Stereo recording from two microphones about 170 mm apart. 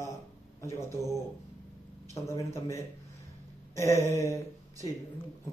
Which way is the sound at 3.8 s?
15° left (ahead or behind).